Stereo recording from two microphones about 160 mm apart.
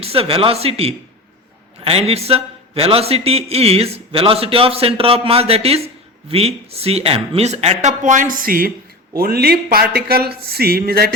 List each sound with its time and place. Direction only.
0.0 s a man's voice: 35° right (ahead or behind); by 8.7 s 65° right (ahead or behind)
9.1 s speech: 75° right (ahead or behind)